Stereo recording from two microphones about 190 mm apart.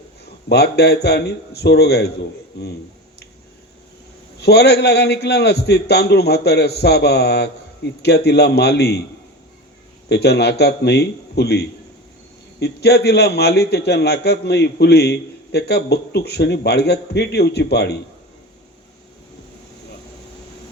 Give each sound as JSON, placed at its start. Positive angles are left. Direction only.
{"t": 0.4, "sound": "a man's voice", "side_deg": 60}
{"t": 4.4, "sound": "a man's voice", "side_deg": 60}
{"t": 10.1, "sound": "a man's voice", "side_deg": 60}